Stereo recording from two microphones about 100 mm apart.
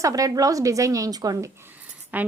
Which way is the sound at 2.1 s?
15° right (ahead or behind).